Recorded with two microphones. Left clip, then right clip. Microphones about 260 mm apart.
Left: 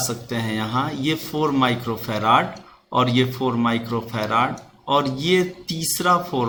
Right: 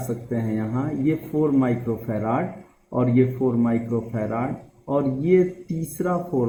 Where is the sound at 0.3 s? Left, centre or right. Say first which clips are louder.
Left 2 dB; left.